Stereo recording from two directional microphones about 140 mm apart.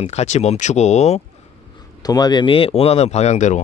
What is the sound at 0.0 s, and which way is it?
Speech, 50° left (ahead or behind).